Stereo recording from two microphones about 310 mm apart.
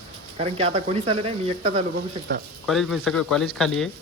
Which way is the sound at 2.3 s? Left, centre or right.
Right.